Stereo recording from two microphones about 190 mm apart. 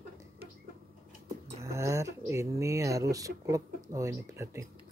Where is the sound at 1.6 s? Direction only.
15° right (ahead or behind).